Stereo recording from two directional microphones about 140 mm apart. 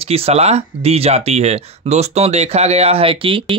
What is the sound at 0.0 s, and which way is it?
Speech, 45° right (ahead or behind).